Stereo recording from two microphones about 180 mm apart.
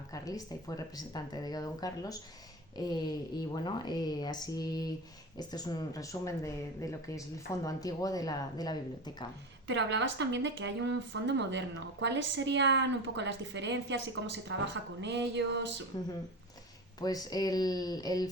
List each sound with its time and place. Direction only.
0.1 s speech: 20° left (ahead or behind)
9.6 s a woman's voice: 80° right
15.9 s speech: 20° left (ahead or behind)